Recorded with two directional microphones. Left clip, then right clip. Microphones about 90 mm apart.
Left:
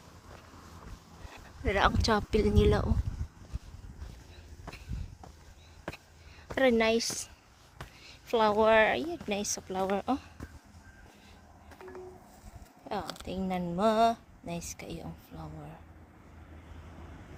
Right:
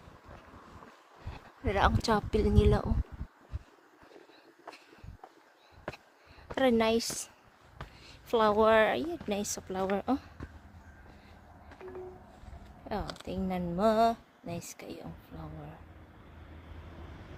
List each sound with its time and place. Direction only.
1.3 s a woman's voice: centre (ahead or behind)
6.6 s speech: 20° right (ahead or behind); by 10.2 s 45° right (ahead or behind)
11.8 s a sound: 5° left (ahead or behind)
12.9 s speech: 15° right (ahead or behind)